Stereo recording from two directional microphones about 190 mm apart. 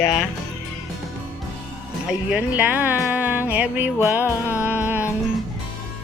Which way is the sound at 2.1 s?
5° right (ahead or behind).